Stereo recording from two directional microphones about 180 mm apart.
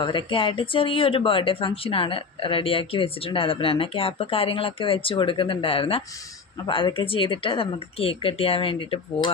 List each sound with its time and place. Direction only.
0.0 s speech: 25° left (ahead or behind)